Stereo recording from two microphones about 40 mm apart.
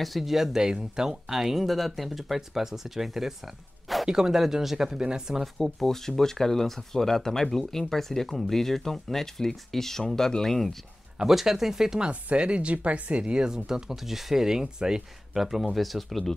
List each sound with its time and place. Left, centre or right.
0.0 s speech: centre
5.4 s speech: centre
11.2 s speech: centre
12.1 s speech: right; by 16.3 s centre